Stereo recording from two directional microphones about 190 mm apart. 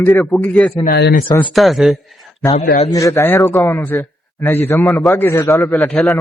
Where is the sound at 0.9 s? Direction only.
60° left (ahead or behind).